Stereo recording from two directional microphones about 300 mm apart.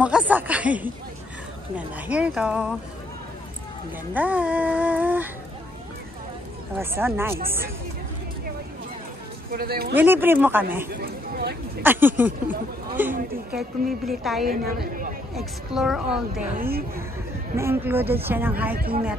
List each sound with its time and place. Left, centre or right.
0.0 s music: centre
4.1 s music: centre
6.8 s speech: centre
9.5 s speech: right
9.9 s speech: centre
11.0 s speech: right
11.8 s speech: centre
13.1 s a woman's voice: right
13.6 s music: centre
14.4 s a woman's voice: right
15.3 s music: centre
16.5 s a woman's voice: right
17.6 s speech: centre